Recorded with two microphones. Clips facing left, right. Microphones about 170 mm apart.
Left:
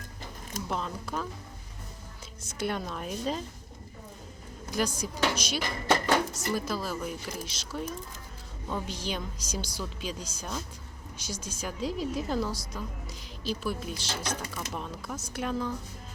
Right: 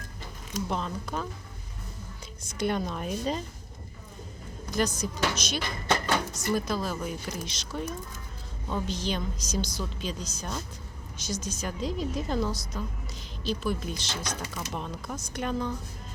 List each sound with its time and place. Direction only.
0.7 s speech: centre (ahead or behind)
2.5 s speech: 5° left (ahead or behind)
4.7 s a woman's voice: 10° left (ahead or behind)